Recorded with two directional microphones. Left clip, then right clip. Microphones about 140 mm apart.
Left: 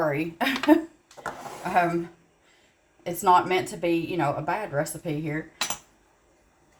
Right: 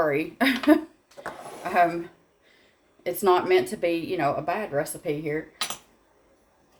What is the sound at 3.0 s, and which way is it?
A woman's voice, 30° right (ahead or behind).